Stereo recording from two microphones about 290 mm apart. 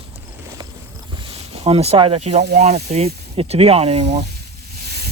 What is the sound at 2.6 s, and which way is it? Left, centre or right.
Speech, right.